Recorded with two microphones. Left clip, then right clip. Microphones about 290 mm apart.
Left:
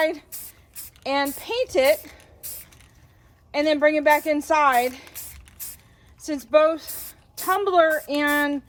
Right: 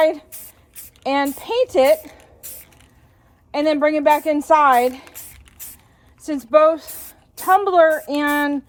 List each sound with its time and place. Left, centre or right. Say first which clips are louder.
0.0 s a woman's voice: right 6 dB; centre
2.4 s a sound: right 1 dB; centre
3.5 s a woman's voice: right 2 dB; centre
5.1 s squish: right 1 dB; centre
6.5 s a woman's voice: right 4 dB; centre